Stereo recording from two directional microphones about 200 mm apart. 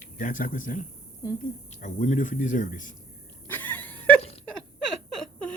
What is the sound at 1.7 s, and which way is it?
Speech, 35° left (ahead or behind).